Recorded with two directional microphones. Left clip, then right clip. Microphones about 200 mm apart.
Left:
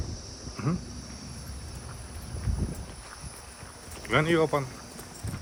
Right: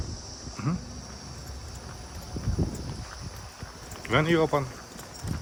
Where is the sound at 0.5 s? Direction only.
Centre (ahead or behind).